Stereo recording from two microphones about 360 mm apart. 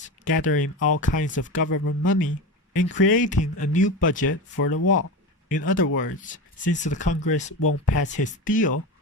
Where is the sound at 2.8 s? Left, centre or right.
Left.